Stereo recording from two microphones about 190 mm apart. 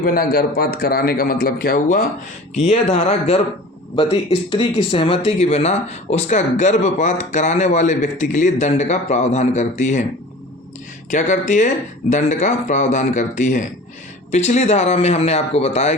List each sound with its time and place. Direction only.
0.0 s a man's voice: 50° left (ahead or behind)
2.9 s speech: 35° left (ahead or behind)
11.1 s speech: 40° left (ahead or behind)